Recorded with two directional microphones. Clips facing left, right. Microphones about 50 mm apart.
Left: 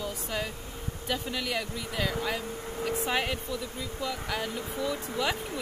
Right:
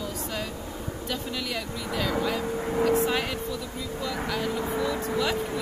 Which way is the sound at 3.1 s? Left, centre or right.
Centre.